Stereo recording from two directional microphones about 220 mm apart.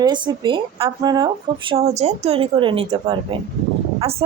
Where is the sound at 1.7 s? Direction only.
30° right (ahead or behind).